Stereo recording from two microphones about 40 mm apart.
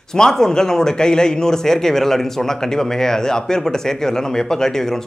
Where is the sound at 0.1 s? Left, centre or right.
Centre.